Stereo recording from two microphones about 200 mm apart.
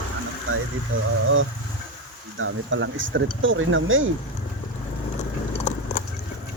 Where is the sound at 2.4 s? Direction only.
75° right (ahead or behind).